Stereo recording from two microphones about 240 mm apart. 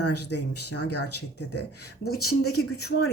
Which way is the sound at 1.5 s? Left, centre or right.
Left.